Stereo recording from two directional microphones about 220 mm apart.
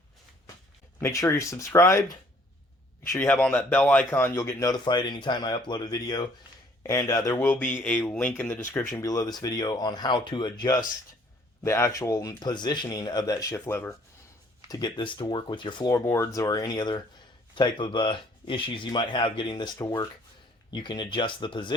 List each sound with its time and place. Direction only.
1.0 s speech: 15° left (ahead or behind)